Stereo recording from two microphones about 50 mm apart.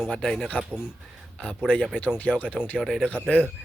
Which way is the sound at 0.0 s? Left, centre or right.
Centre.